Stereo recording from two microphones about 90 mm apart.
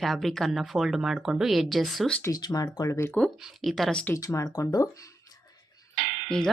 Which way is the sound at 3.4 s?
5° right (ahead or behind).